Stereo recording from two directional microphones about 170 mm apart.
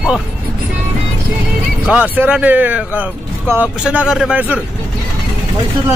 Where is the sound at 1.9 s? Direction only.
10° right (ahead or behind).